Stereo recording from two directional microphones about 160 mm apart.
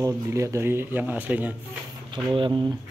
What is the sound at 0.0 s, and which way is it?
Speech, 20° right (ahead or behind).